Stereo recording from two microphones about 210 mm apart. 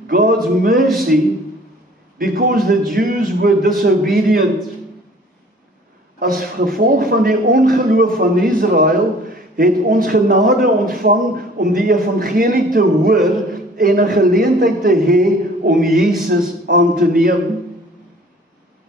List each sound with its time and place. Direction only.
0.0 s music: 45° right (ahead or behind)
1.1 s a man's voice: centre (ahead or behind)
2.1 s a man's voice: 45° right (ahead or behind)
6.1 s a man's voice: 45° right (ahead or behind)